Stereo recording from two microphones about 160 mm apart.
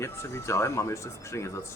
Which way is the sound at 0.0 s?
15° left (ahead or behind).